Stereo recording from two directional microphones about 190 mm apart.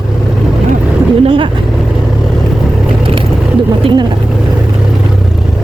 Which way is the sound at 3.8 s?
25° right (ahead or behind).